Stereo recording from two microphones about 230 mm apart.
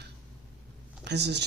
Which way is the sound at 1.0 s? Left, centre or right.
Right.